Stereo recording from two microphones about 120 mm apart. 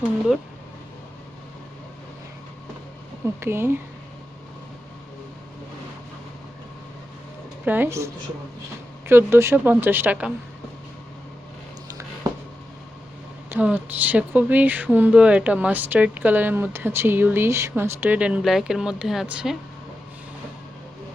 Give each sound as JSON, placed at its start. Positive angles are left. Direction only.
{"t": 3.4, "sound": "speech", "side_deg": -20}
{"t": 7.6, "sound": "speech", "side_deg": -15}
{"t": 13.5, "sound": "speech", "side_deg": -15}